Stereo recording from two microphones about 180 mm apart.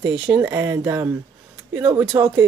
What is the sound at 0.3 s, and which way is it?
Speech, 15° right (ahead or behind).